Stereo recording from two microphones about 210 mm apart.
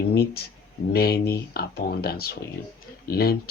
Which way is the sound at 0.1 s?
45° left (ahead or behind).